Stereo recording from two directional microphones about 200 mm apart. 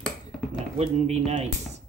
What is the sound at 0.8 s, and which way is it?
Speech, 35° right (ahead or behind).